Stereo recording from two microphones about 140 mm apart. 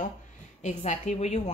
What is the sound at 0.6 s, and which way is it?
Speech, 55° left (ahead or behind).